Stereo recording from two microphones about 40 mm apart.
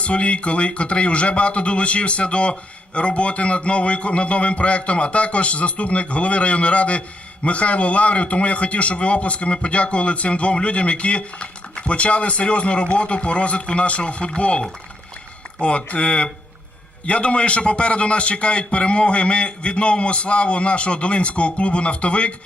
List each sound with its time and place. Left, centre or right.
0.0 s a man's voice: left